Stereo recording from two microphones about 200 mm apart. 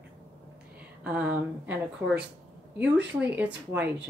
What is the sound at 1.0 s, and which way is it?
Speech, 5° right (ahead or behind).